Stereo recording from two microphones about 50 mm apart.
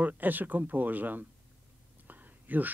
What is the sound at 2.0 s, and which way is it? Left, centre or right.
Whispering, right.